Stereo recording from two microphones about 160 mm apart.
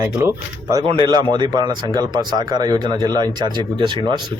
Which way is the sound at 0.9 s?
30° right (ahead or behind).